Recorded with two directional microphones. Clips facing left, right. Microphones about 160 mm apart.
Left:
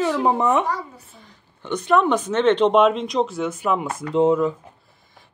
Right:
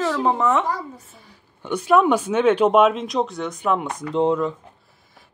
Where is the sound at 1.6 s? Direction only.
10° right (ahead or behind).